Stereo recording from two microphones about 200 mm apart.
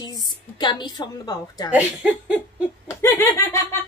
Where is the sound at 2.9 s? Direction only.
10° left (ahead or behind).